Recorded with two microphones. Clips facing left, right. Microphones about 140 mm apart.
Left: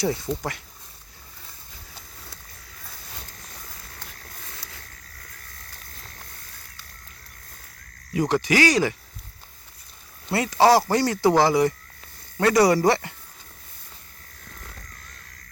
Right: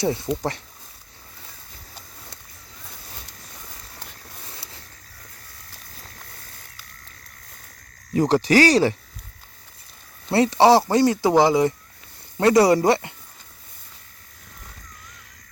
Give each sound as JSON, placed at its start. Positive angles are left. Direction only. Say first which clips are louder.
{"t": 0.0, "sound": "speech", "louder": "right 2 dB", "side_deg": -25}
{"t": 4.4, "sound": "a sound", "louder": "right 2 dB", "side_deg": -25}
{"t": 8.1, "sound": "insect", "louder": "right 4 dB", "side_deg": -35}
{"t": 10.3, "sound": "speech", "louder": "right 3 dB", "side_deg": -25}